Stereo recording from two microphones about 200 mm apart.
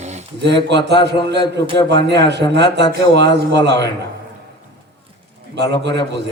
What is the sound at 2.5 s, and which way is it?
A man's voice, 60° right (ahead or behind).